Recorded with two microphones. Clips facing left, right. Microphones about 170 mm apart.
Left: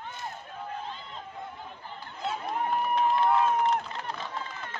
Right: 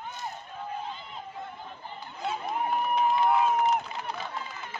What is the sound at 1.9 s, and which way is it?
Crowd, centre (ahead or behind).